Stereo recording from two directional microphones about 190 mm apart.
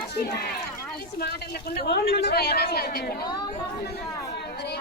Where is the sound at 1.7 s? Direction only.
55° left (ahead or behind).